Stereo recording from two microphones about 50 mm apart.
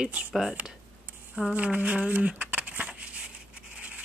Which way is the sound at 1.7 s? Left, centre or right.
Right.